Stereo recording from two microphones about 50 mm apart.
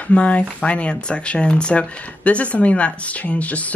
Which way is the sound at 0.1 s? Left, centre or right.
Left.